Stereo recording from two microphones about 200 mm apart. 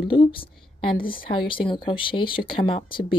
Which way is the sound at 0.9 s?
45° left (ahead or behind).